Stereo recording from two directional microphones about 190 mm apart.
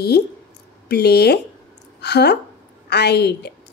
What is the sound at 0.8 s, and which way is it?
A woman's voice, 55° left (ahead or behind).